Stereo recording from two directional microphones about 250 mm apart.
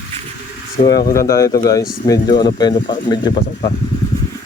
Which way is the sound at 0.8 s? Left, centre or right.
Centre.